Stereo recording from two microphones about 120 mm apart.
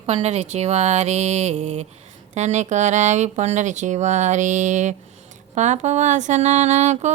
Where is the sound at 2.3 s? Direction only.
75° right (ahead or behind).